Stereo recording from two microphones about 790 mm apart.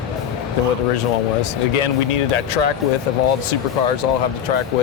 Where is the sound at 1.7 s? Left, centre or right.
Left.